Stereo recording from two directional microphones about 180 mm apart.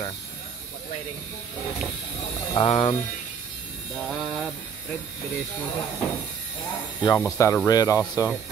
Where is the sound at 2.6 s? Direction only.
35° left (ahead or behind).